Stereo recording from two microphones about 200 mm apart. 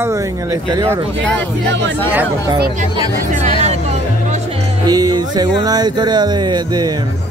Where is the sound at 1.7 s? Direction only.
60° right (ahead or behind).